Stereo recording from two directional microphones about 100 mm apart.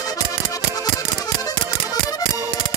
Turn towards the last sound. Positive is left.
turn(degrees=40)  # may be behind; listen again after turning